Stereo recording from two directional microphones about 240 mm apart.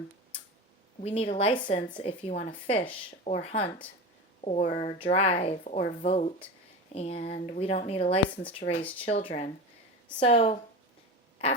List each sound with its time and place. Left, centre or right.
1.0 s a woman's voice: left